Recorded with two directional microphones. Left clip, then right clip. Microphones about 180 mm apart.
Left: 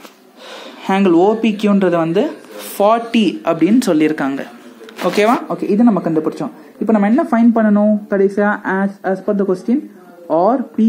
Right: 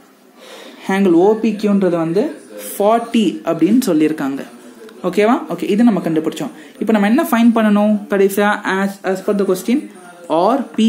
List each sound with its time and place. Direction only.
0.8 s a woman's voice: 5° left (ahead or behind)
7.1 s speech: 15° right (ahead or behind)
7.3 s speech: 5° right (ahead or behind)
10.2 s speech: 5° right (ahead or behind)